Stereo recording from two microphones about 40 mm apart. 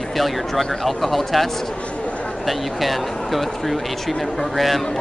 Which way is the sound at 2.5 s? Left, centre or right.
Centre.